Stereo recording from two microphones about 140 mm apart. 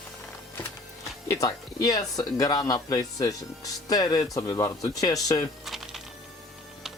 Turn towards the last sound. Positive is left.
turn(degrees=0)  # may be behind; listen again after turning